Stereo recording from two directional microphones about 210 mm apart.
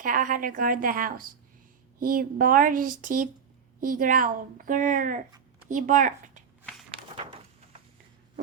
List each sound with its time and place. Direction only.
0.0 s a woman's voice: 40° right (ahead or behind)